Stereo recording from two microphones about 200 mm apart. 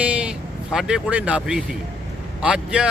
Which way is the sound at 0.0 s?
5° right (ahead or behind).